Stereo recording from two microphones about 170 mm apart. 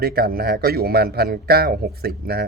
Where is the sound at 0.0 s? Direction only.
65° right (ahead or behind).